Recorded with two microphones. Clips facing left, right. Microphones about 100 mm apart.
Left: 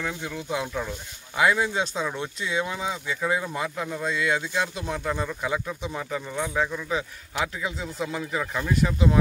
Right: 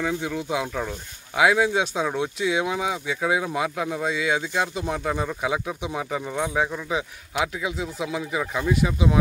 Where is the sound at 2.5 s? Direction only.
15° right (ahead or behind).